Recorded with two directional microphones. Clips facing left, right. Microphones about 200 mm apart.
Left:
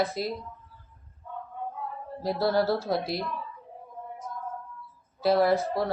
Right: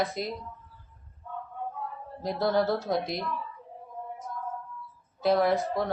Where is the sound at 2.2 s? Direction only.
5° left (ahead or behind).